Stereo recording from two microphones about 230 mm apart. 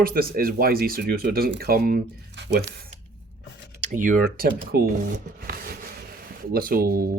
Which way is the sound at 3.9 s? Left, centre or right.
Right.